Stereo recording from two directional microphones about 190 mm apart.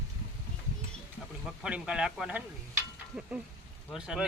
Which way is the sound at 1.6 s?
5° right (ahead or behind).